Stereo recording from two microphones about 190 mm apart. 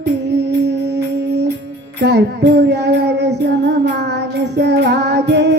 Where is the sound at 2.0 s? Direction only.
65° right (ahead or behind).